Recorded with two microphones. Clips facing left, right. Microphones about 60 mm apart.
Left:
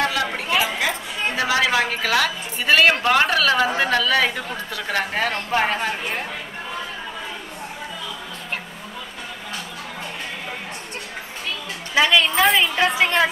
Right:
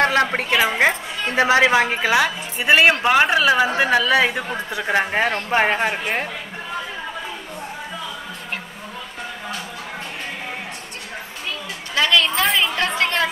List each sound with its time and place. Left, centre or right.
0.0 s a sound: right
1.3 s a woman's voice: right
11.9 s a woman's voice: centre